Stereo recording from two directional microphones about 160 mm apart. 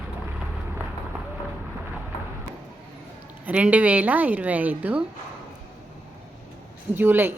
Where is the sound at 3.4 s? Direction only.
10° right (ahead or behind).